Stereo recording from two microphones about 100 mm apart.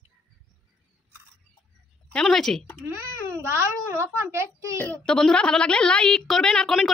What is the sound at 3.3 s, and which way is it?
A child's voice, 25° right (ahead or behind).